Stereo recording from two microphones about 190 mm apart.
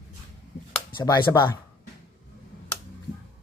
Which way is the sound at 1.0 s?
20° left (ahead or behind).